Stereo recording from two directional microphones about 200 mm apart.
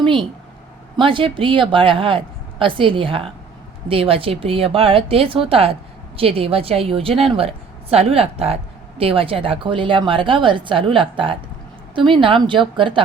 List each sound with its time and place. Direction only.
0.0 s a woman's voice: 25° right (ahead or behind)